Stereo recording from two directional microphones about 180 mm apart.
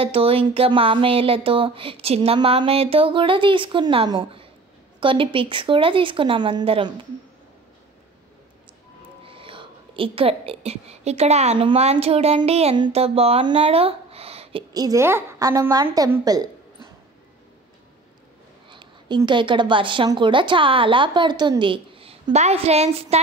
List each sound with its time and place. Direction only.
0.0 s speech: 30° right (ahead or behind)
9.2 s a woman's voice: 30° right (ahead or behind)
14.7 s speech: 20° right (ahead or behind)
18.7 s speech: 25° right (ahead or behind)